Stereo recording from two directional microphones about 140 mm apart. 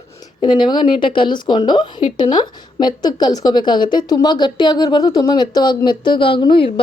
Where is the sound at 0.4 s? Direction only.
35° left (ahead or behind).